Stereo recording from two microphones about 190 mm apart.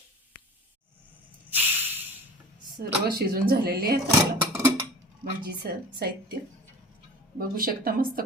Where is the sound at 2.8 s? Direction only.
55° right (ahead or behind).